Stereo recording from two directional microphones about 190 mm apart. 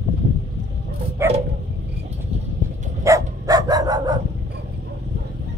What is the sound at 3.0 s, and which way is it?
Dog, 15° right (ahead or behind).